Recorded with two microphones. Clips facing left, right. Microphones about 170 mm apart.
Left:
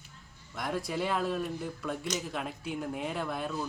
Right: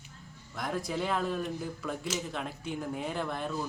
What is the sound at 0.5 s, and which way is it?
Speech, centre (ahead or behind).